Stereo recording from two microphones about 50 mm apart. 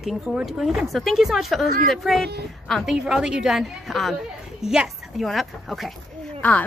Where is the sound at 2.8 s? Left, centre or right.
Centre.